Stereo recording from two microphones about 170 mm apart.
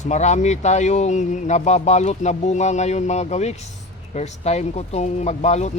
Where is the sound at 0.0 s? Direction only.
45° left (ahead or behind).